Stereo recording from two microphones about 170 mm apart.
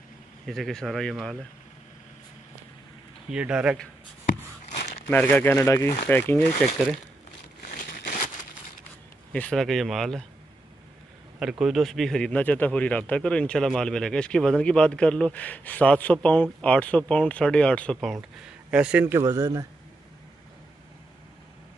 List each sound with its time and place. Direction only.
0.5 s speech: centre (ahead or behind)
3.3 s speech: 5° right (ahead or behind)
5.1 s speech: 10° left (ahead or behind)
6.0 s speech: 10° left (ahead or behind)
7.6 s a sound: 55° left (ahead or behind)
9.3 s speech: 5° left (ahead or behind)
11.3 s speech: 5° right (ahead or behind)
18.7 s a man's voice: 5° right (ahead or behind)